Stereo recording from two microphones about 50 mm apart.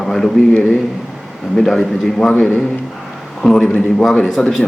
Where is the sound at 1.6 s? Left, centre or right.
Centre.